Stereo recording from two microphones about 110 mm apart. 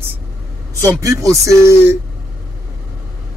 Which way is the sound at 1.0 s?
30° right (ahead or behind).